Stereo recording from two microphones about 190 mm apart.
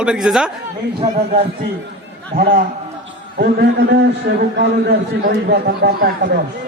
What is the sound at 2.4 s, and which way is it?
A man's voice, 50° right (ahead or behind).